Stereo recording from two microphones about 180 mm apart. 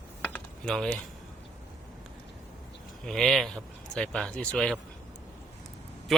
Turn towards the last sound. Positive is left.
turn(degrees=0)  # may be behind; listen again after turning